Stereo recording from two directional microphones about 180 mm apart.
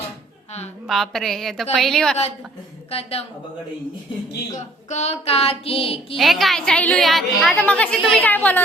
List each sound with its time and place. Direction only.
0.9 s a woman's voice: centre (ahead or behind)
2.9 s a woman's voice: 35° left (ahead or behind)
4.5 s a woman's voice: 40° left (ahead or behind)
6.1 s a woman's voice: centre (ahead or behind)